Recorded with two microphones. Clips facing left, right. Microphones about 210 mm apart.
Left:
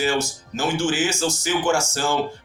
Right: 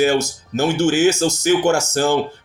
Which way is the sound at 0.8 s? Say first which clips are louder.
Right 7 dB; 65° right (ahead or behind).